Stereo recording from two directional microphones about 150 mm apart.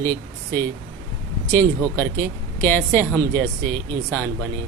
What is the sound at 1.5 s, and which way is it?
Speech, 15° left (ahead or behind).